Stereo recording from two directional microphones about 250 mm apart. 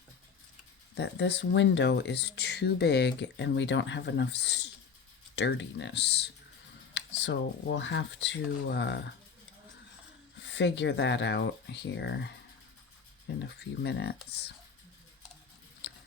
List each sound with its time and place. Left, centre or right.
0.9 s speech: left
10.4 s speech: left
13.4 s speech: left